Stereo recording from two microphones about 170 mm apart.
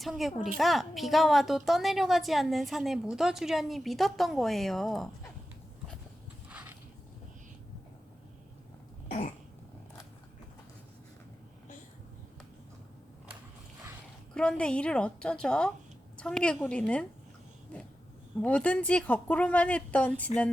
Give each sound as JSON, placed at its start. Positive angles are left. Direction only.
{"t": 0.0, "sound": "a woman's voice", "side_deg": 0}
{"t": 6.5, "sound": "a sound", "side_deg": -10}
{"t": 9.0, "sound": "cough", "side_deg": 40}
{"t": 14.3, "sound": "a woman's voice", "side_deg": 5}
{"t": 18.4, "sound": "speech", "side_deg": 10}